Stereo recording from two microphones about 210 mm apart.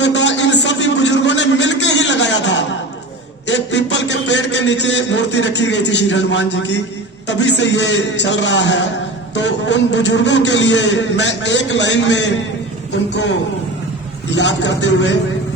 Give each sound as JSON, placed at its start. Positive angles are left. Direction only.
{"t": 0.0, "sound": "a sound", "side_deg": 60}
{"t": 7.3, "sound": "a man's voice", "side_deg": 55}
{"t": 14.3, "sound": "a man's voice", "side_deg": 55}